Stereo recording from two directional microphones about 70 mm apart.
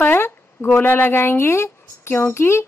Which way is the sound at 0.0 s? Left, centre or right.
Left.